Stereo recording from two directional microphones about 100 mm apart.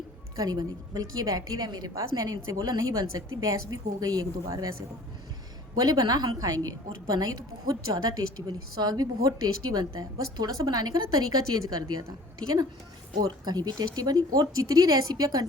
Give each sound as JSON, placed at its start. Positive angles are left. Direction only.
{"t": 0.3, "sound": "a woman's voice", "side_deg": -40}
{"t": 5.8, "sound": "a woman's voice", "side_deg": -40}
{"t": 13.2, "sound": "a woman's voice", "side_deg": -40}